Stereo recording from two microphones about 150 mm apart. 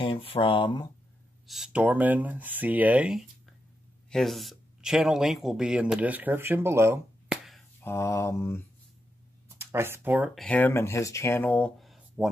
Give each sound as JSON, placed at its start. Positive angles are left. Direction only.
{"t": 0.0, "sound": "speech", "side_deg": 40}
{"t": 1.5, "sound": "speech", "side_deg": -5}
{"t": 7.2, "sound": "a sound", "side_deg": 0}
{"t": 7.8, "sound": "speech", "side_deg": 20}
{"t": 9.6, "sound": "speech", "side_deg": -15}
{"t": 10.3, "sound": "speech", "side_deg": 5}